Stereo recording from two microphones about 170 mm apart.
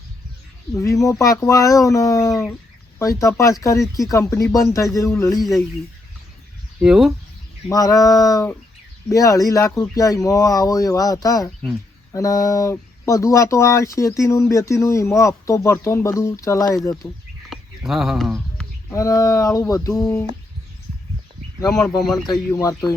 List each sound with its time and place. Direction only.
0.7 s speech: 20° left (ahead or behind)
5.4 s speech: centre (ahead or behind)
6.8 s speech: 5° right (ahead or behind)
7.7 s speech: 20° left (ahead or behind)
17.5 s a sound: centre (ahead or behind)
18.9 s speech: 20° left (ahead or behind)
22.3 s speech: 20° left (ahead or behind)